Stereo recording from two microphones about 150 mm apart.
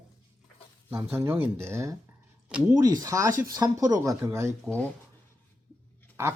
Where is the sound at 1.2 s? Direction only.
10° right (ahead or behind).